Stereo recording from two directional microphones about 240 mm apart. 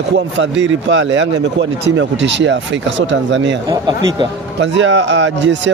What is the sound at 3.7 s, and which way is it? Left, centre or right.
Speech, centre.